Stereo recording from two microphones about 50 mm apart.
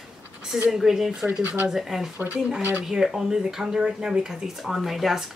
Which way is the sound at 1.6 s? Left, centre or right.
Centre.